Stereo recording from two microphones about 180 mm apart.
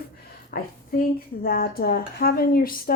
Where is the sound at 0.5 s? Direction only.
50° left (ahead or behind).